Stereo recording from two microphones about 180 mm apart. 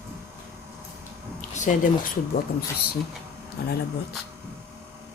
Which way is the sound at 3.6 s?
60° left (ahead or behind).